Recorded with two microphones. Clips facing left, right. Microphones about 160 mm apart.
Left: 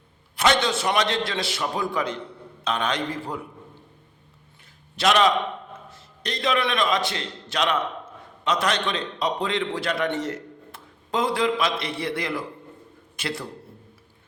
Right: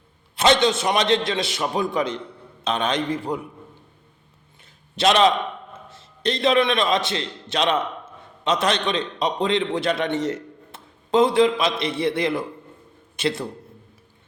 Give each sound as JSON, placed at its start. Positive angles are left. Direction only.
{"t": 0.3, "sound": "a man's voice", "side_deg": -20}
{"t": 4.9, "sound": "a man's voice", "side_deg": -25}